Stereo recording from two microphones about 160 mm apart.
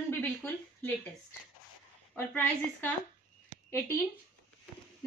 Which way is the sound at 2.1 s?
10° left (ahead or behind).